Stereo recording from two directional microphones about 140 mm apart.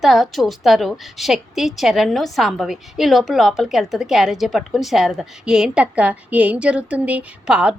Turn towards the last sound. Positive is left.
turn(degrees=-5)  # may be behind; listen again after turning